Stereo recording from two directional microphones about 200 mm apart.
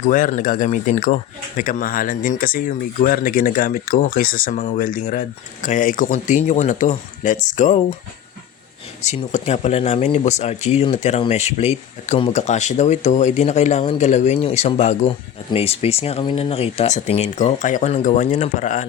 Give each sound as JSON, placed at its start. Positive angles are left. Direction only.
{"t": 0.1, "sound": "speech", "side_deg": 40}
{"t": 9.0, "sound": "speech", "side_deg": 35}